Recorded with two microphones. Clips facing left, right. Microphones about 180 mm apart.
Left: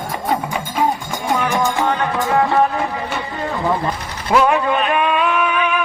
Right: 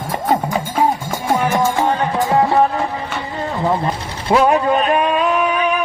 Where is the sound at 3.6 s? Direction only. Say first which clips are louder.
Right 2 dB; 25° right (ahead or behind).